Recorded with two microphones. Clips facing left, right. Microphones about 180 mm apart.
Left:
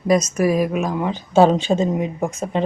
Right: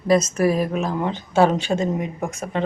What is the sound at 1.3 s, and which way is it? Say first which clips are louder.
Speech: left 4 dB; 20° left (ahead or behind).